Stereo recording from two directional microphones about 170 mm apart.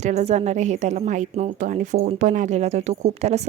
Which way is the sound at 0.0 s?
40° right (ahead or behind).